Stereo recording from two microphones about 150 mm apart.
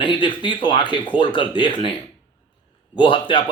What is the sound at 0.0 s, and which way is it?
Speech, 35° left (ahead or behind).